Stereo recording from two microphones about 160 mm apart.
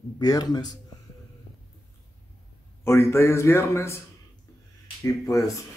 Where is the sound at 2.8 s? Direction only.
15° left (ahead or behind).